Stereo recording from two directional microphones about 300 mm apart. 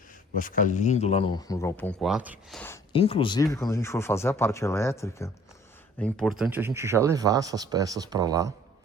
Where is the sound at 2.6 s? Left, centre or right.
Centre.